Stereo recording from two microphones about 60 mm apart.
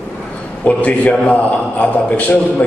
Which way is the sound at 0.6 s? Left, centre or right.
Left.